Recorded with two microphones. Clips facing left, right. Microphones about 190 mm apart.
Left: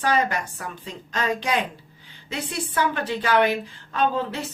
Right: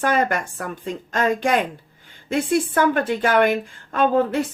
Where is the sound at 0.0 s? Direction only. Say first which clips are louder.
Right 3 dB; 50° right (ahead or behind).